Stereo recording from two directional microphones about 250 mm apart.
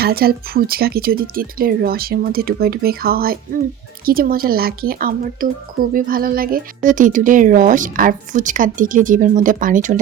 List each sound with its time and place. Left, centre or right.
0.0 s speech: right